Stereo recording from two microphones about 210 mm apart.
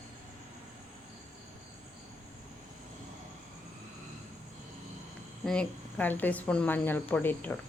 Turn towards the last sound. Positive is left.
turn(degrees=10)  # may be behind; listen again after turning